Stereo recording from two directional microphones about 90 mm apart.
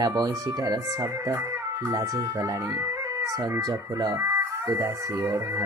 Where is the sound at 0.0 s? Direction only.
45° right (ahead or behind).